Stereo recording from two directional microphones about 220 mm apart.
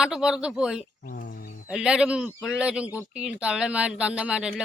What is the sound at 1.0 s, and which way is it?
Bird, 40° left (ahead or behind).